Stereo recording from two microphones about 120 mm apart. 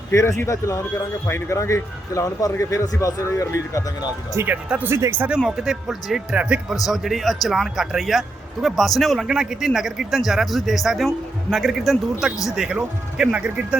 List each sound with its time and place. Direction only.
0.1 s speech: 25° left (ahead or behind)
4.4 s speech: 15° right (ahead or behind)
5.5 s speech: 5° right (ahead or behind)